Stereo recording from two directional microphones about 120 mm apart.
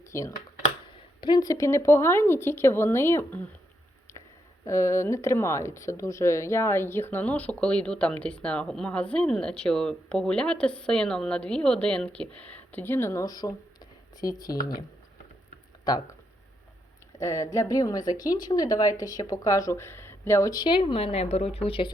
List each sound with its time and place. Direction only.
0.1 s speech: 25° left (ahead or behind)
4.6 s a woman's voice: 25° left (ahead or behind)
17.2 s a woman's voice: 25° left (ahead or behind); by 21.9 s 50° left (ahead or behind)